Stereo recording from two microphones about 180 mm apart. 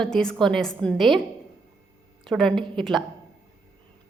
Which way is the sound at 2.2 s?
Centre (ahead or behind).